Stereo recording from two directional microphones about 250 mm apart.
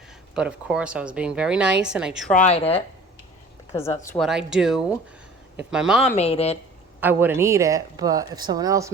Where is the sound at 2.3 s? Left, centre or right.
Left.